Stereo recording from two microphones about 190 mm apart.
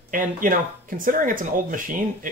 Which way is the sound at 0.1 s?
45° right (ahead or behind).